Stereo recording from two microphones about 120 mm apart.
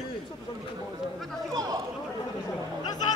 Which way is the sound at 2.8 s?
35° left (ahead or behind).